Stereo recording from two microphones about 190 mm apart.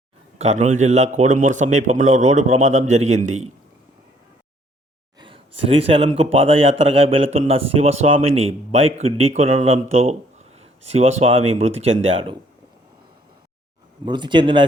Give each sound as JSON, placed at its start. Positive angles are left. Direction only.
{"t": 0.3, "sound": "speech", "side_deg": -35}
{"t": 5.2, "sound": "speech", "side_deg": -30}
{"t": 14.0, "sound": "speech", "side_deg": -25}